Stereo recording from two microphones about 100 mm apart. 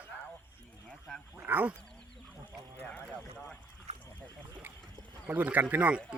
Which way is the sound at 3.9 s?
90° right.